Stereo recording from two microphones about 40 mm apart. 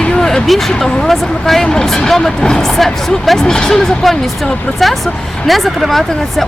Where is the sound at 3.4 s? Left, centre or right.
Centre.